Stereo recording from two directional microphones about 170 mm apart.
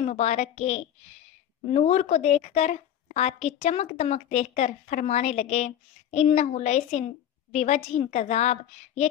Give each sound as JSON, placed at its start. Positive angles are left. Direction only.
{"t": 0.0, "sound": "a woman's voice", "side_deg": 40}